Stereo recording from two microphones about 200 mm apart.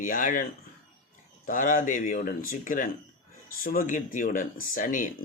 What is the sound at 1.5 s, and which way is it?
Speech, 45° left (ahead or behind).